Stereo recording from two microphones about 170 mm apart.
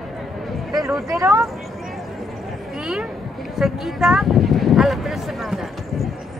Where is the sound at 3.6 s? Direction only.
Centre (ahead or behind).